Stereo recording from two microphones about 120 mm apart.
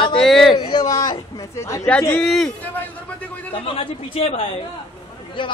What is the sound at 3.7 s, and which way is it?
Speech, 50° left (ahead or behind).